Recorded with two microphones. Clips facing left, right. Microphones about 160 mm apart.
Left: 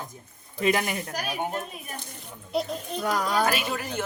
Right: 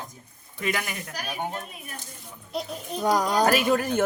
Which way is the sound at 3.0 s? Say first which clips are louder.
Right 3 dB; 20° right (ahead or behind).